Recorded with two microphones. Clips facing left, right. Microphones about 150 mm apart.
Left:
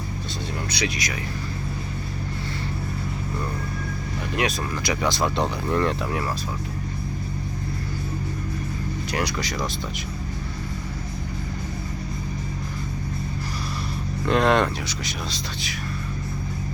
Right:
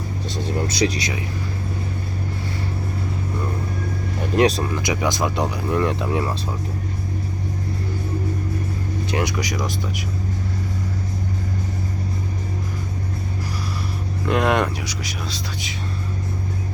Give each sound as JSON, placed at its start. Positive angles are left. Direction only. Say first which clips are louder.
{"t": 0.7, "sound": "speech", "louder": "right 6 dB", "side_deg": -40}
{"t": 4.4, "sound": "speech", "louder": "right 9 dB", "side_deg": -35}
{"t": 4.7, "sound": "speech", "louder": "right 2 dB", "side_deg": -20}
{"t": 9.0, "sound": "speech", "louder": "right 4 dB", "side_deg": -20}
{"t": 14.3, "sound": "speech", "louder": "even", "side_deg": -10}